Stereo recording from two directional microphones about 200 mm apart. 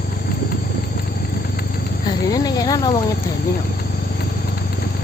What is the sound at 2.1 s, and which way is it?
Snake, 20° left (ahead or behind).